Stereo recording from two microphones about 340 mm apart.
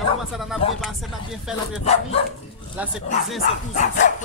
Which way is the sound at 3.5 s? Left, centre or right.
Left.